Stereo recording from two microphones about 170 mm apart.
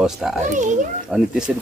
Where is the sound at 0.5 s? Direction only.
45° right (ahead or behind).